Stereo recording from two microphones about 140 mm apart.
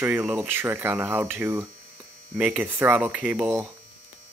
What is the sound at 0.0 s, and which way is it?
Speech, 15° right (ahead or behind).